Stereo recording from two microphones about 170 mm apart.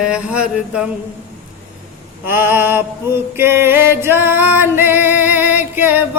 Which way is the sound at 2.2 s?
10° right (ahead or behind).